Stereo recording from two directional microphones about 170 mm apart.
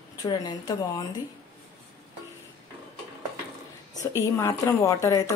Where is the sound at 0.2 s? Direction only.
25° left (ahead or behind).